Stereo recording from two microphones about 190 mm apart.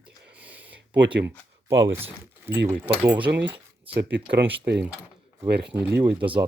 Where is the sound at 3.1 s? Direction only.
25° right (ahead or behind).